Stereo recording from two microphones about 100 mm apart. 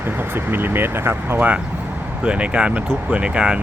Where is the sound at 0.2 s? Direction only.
20° right (ahead or behind).